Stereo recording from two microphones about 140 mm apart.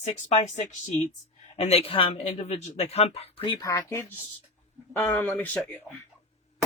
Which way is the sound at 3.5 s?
25° left (ahead or behind).